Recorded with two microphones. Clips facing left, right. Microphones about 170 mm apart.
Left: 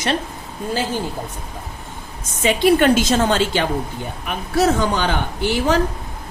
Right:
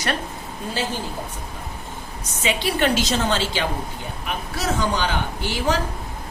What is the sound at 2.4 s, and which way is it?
A woman's voice, 50° left (ahead or behind).